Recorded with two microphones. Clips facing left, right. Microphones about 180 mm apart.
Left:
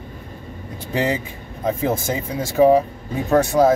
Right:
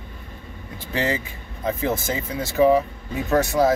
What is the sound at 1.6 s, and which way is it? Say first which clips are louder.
Speech: left 3 dB; 30° left (ahead or behind).